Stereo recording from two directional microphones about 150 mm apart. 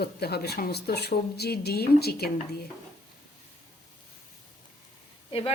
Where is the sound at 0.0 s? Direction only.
90° left.